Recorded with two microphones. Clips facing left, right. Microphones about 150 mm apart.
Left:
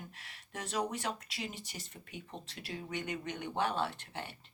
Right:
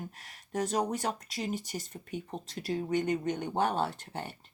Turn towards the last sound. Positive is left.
turn(degrees=-40)  # may be behind; listen again after turning